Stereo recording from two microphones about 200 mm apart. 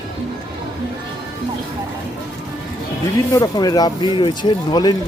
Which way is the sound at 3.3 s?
20° left (ahead or behind).